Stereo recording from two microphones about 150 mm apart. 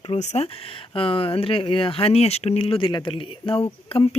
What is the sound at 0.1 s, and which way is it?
Speech, 45° left (ahead or behind).